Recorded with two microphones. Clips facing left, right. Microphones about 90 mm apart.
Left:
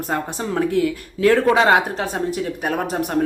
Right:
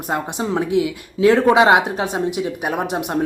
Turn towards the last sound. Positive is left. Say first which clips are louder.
# even
turn(degrees=-15)  # may be behind; listen again after turning